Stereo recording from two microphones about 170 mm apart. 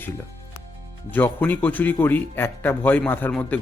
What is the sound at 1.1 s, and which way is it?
Speech, 10° left (ahead or behind).